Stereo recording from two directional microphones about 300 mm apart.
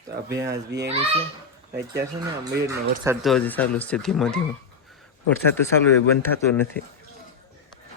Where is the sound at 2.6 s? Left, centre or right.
Centre.